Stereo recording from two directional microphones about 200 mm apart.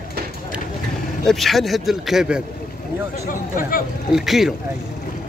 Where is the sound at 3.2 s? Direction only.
45° left (ahead or behind).